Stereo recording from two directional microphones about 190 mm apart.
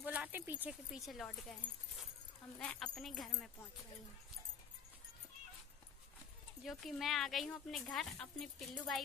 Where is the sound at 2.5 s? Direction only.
5° left (ahead or behind).